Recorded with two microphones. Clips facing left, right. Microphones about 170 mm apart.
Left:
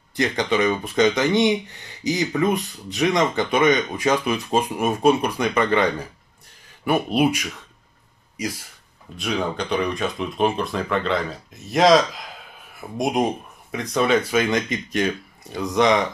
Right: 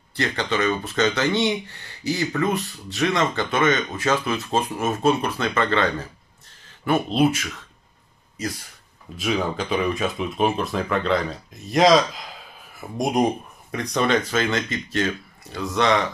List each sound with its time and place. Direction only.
0.1 s speech: 15° left (ahead or behind)
9.1 s speech: centre (ahead or behind); by 16.1 s 15° left (ahead or behind)